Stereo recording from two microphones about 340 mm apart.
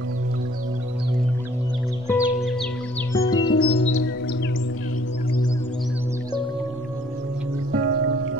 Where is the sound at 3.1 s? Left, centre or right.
Centre.